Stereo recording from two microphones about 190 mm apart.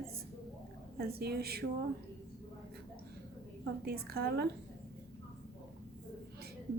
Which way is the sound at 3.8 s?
55° right (ahead or behind).